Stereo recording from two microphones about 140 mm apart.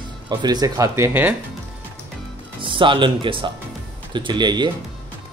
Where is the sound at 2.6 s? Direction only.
35° right (ahead or behind).